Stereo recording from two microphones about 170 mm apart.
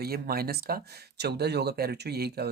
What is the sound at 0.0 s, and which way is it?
Speech, 65° right (ahead or behind).